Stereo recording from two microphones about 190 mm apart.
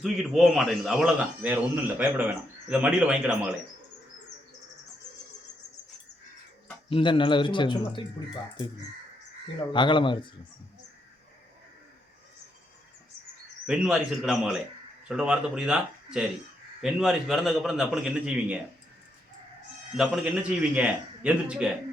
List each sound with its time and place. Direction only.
0.0 s a man's voice: centre (ahead or behind)
6.9 s a man's voice: 25° left (ahead or behind)
9.7 s a man's voice: 25° left (ahead or behind)
13.7 s a man's voice: centre (ahead or behind)
20.0 s a man's voice: 5° right (ahead or behind)